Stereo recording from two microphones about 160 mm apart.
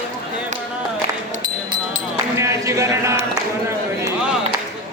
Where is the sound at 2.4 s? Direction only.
20° right (ahead or behind).